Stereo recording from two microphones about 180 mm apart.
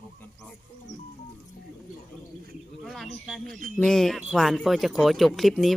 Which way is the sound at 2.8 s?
Centre (ahead or behind).